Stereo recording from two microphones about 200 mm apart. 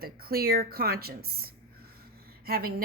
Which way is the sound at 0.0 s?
50° right (ahead or behind).